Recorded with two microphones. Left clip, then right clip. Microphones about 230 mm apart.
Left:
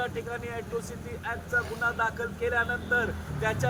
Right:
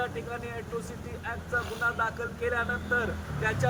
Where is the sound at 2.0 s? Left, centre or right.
Centre.